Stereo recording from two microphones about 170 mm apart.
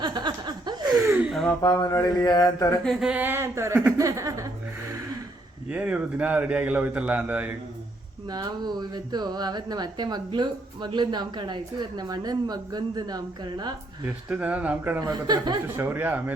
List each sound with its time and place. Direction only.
0.0 s chuckle: 25° right (ahead or behind)
1.0 s gasp: 10° right (ahead or behind)
1.6 s mantra: 25° left (ahead or behind)
2.8 s a man's voice: centre (ahead or behind); by 4.5 s 20° right (ahead or behind)
5.6 s a man's voice: 10° right (ahead or behind)
8.3 s speech: 25° right (ahead or behind)
14.3 s a man's voice: 10° right (ahead or behind)